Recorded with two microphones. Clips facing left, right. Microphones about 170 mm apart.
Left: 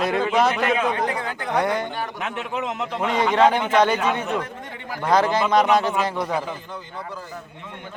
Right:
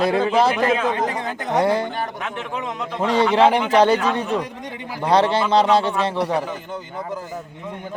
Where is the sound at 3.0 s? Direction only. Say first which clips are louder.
Right 2 dB; 35° right (ahead or behind).